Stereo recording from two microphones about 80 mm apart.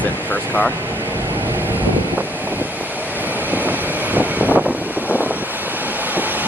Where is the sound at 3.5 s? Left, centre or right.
Right.